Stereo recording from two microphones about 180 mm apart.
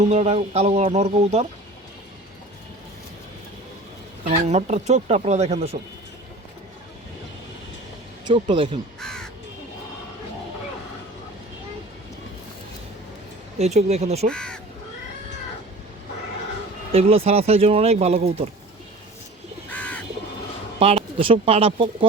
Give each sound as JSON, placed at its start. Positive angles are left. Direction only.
{"t": 0.0, "sound": "speech", "side_deg": -40}
{"t": 4.3, "sound": "speech", "side_deg": -40}
{"t": 8.2, "sound": "speech", "side_deg": -25}
{"t": 9.0, "sound": "crow", "side_deg": 5}
{"t": 13.6, "sound": "speech", "side_deg": -40}
{"t": 14.3, "sound": "speech", "side_deg": 5}
{"t": 16.9, "sound": "speech", "side_deg": -35}
{"t": 19.7, "sound": "crow", "side_deg": 10}
{"t": 20.7, "sound": "speech", "side_deg": -30}